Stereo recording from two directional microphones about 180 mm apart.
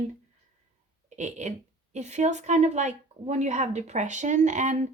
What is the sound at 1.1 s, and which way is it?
A woman's voice, 40° right (ahead or behind).